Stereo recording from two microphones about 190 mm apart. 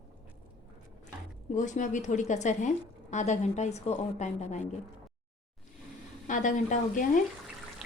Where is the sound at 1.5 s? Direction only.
40° left (ahead or behind).